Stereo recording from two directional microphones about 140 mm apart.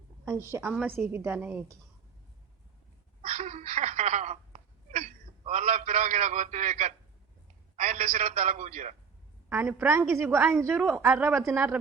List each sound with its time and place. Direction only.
0.3 s a woman's voice: 20° right (ahead or behind)
3.2 s a sound: 50° right (ahead or behind)
8.4 s a man's voice: 60° right (ahead or behind)
9.5 s a woman's voice: 15° right (ahead or behind)